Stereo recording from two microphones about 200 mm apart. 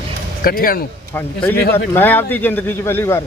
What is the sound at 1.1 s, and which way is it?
Speech, 10° left (ahead or behind).